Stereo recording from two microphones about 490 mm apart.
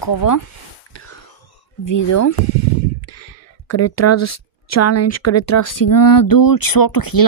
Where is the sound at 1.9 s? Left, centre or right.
Left.